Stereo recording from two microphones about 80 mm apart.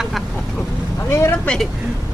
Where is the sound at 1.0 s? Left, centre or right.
Left.